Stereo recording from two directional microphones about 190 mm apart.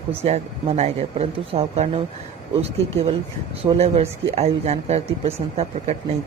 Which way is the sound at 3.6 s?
30° right (ahead or behind).